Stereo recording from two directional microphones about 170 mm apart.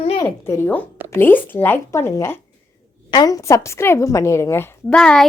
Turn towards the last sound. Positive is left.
turn(degrees=5)  # may be behind; listen again after turning